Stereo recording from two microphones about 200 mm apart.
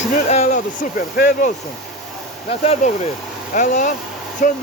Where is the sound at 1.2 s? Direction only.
45° left (ahead or behind).